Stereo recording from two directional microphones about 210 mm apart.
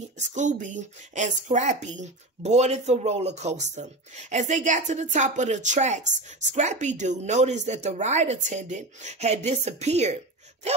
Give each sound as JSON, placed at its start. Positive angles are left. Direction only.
{"t": 0.3, "sound": "a woman's voice", "side_deg": -35}